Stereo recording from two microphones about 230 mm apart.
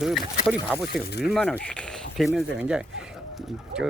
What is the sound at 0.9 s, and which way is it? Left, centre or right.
Speech, left.